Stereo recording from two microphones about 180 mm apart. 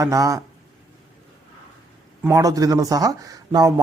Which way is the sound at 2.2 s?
20° right (ahead or behind).